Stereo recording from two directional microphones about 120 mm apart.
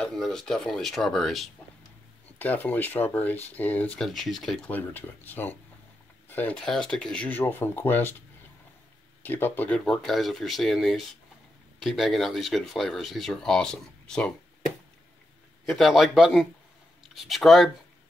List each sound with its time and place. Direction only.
0.0 s speech: 5° left (ahead or behind)
2.3 s speech: 15° left (ahead or behind)
4.0 s speech: centre (ahead or behind); by 8.2 s 15° left (ahead or behind)
9.2 s speech: 15° left (ahead or behind)
9.8 s speech: 5° left (ahead or behind)
15.6 s speech: centre (ahead or behind)